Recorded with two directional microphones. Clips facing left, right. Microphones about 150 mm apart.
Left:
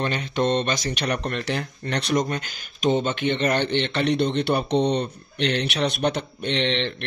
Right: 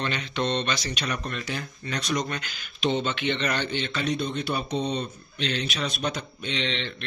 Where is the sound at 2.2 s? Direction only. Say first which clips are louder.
Left 4 dB; 45° left (ahead or behind).